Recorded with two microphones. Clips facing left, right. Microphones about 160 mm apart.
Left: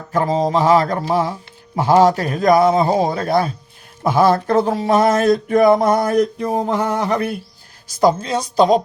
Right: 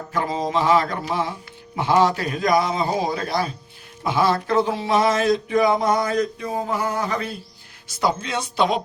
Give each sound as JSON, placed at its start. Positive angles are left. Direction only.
{"t": 0.1, "sound": "mantra", "side_deg": 40}
{"t": 1.7, "sound": "speech", "side_deg": 40}
{"t": 7.9, "sound": "mantra", "side_deg": 40}